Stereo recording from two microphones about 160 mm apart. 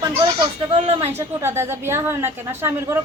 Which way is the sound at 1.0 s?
15° right (ahead or behind).